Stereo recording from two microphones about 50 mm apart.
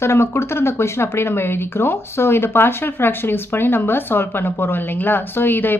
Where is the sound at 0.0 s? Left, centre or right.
Left.